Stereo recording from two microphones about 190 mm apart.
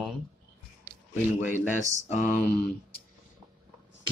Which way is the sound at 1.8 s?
40° left (ahead or behind).